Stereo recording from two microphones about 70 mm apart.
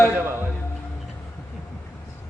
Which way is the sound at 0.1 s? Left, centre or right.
Right.